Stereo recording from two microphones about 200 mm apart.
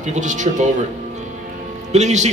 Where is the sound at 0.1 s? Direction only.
40° right (ahead or behind).